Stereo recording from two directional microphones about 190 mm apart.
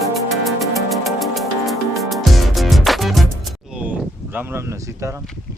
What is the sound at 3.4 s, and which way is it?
Speech, 5° right (ahead or behind).